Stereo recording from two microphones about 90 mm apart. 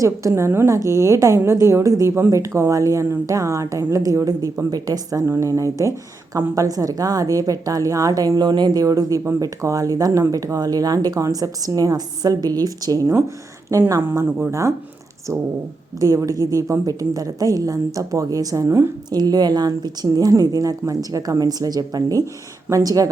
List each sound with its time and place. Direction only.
0.0 s a woman's voice: 35° right (ahead or behind)
15.3 s a woman's voice: 35° right (ahead or behind)
19.1 s a woman's voice: 45° right (ahead or behind)